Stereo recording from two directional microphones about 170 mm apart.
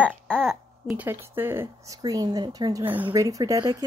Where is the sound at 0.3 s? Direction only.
Centre (ahead or behind).